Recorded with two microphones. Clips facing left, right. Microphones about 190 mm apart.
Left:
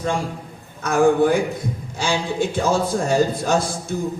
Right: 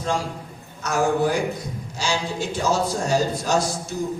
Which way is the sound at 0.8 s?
55° left (ahead or behind).